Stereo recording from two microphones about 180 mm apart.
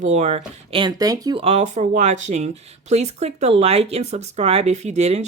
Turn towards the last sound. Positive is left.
turn(degrees=-40)  # may be behind; listen again after turning